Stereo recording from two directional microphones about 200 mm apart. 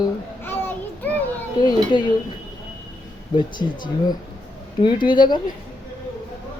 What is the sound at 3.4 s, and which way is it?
Speech, 20° left (ahead or behind).